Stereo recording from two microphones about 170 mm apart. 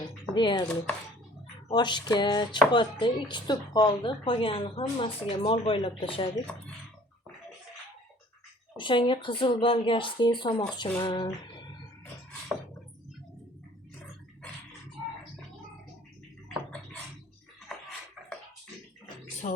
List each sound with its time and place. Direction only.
0.3 s a woman's voice: 25° left (ahead or behind)
8.8 s speech: 30° left (ahead or behind)
17.7 s music: centre (ahead or behind)
19.4 s speech: 45° left (ahead or behind)